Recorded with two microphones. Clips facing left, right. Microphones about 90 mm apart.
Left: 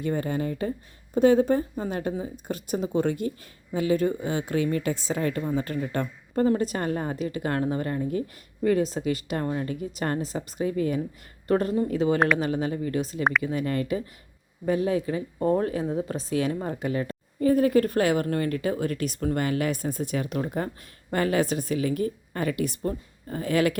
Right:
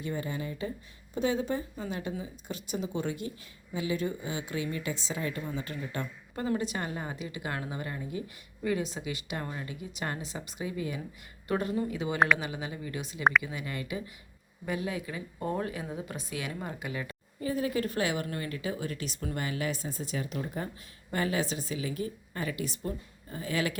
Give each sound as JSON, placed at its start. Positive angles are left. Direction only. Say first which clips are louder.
{"t": 0.0, "sound": "speech", "louder": "left 8 dB", "side_deg": 50}